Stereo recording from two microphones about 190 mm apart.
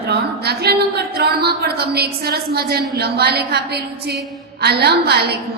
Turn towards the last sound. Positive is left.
turn(degrees=-60)  # may be behind; listen again after turning